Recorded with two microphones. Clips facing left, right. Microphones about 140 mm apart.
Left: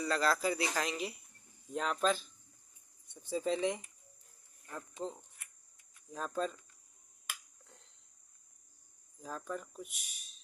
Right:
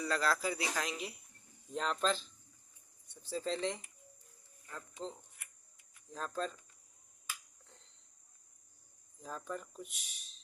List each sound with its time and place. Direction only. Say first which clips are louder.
0.0 s speech: left 2 dB; centre (ahead or behind)
3.1 s speech: left 3 dB; 20° left (ahead or behind)
9.2 s speech: left 1 dB; centre (ahead or behind)